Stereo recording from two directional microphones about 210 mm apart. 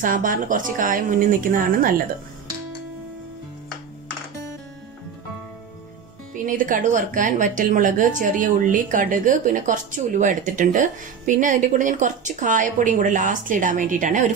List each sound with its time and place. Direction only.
0.0 s a woman's voice: 40° right (ahead or behind)
6.3 s a woman's voice: 40° right (ahead or behind)